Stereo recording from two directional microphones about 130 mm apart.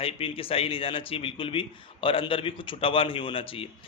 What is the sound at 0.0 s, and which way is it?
Speech, 45° left (ahead or behind).